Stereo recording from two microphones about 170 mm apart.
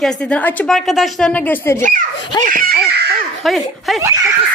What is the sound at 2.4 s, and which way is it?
Giggle, 55° right (ahead or behind).